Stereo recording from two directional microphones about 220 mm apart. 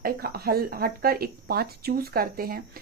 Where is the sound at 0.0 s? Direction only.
45° right (ahead or behind).